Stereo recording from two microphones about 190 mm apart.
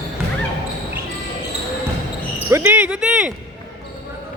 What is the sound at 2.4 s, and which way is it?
Speech, 10° right (ahead or behind).